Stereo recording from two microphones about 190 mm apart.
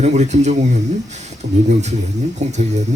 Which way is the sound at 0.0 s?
35° right (ahead or behind).